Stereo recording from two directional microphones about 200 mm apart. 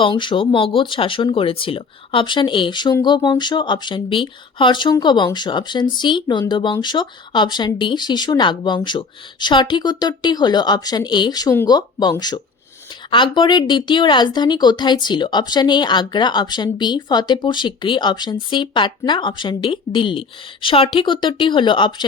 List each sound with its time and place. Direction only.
0.0 s speech: 25° left (ahead or behind)